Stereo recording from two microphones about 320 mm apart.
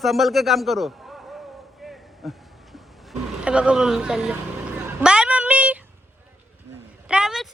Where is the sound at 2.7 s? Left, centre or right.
Centre.